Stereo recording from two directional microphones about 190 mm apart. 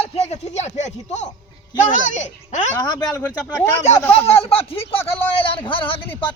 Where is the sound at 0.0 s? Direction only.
35° left (ahead or behind).